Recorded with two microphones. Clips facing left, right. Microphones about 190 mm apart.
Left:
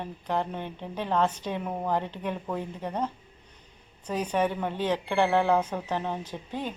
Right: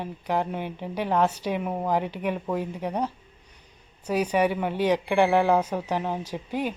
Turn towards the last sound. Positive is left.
turn(degrees=-10)  # may be behind; listen again after turning